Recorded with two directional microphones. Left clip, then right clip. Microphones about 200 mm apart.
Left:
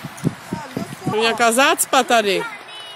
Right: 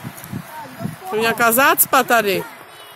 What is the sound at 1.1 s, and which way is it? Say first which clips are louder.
Speech: even; 5° right (ahead or behind).